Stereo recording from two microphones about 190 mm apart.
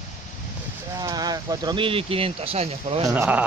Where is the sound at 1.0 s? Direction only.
20° right (ahead or behind).